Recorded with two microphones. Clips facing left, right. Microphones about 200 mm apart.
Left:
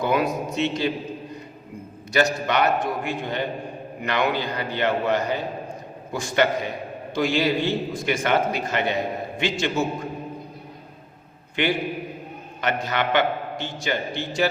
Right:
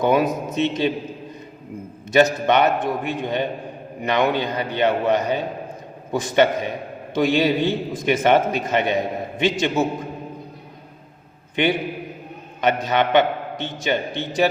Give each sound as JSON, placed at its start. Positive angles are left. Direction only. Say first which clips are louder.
{"t": 0.0, "sound": "a man's voice", "louder": "right 4 dB", "side_deg": -20}
{"t": 2.1, "sound": "a man's voice", "louder": "right 5 dB", "side_deg": -20}
{"t": 11.5, "sound": "a man's voice", "louder": "right 3 dB", "side_deg": -20}